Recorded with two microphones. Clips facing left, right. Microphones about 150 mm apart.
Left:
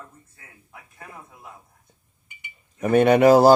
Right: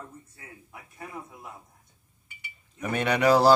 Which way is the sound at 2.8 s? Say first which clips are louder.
Left 9 dB; 45° left (ahead or behind).